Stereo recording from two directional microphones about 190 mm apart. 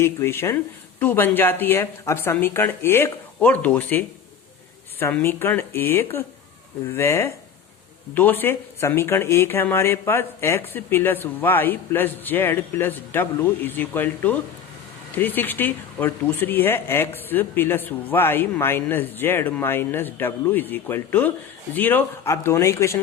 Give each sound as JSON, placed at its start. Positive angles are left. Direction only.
{"t": 0.0, "sound": "speech", "side_deg": 15}